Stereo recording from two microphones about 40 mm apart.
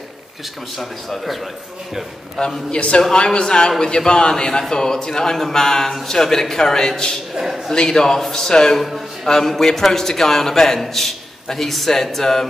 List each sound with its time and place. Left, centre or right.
0.7 s a man's voice: centre
2.3 s a man's voice: left
3.0 s a man's voice: centre
7.3 s a man's voice: centre
7.7 s a man's voice: centre
8.7 s a man's voice: centre